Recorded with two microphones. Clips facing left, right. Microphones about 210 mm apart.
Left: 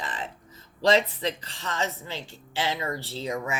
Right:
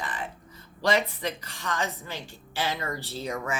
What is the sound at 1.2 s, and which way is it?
Speech, 25° left (ahead or behind).